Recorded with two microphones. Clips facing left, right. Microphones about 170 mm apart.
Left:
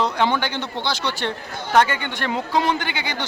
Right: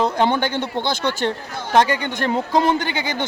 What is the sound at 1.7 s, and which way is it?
Speech, 35° right (ahead or behind).